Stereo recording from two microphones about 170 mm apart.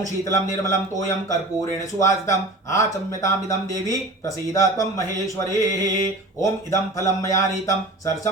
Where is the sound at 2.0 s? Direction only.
20° left (ahead or behind).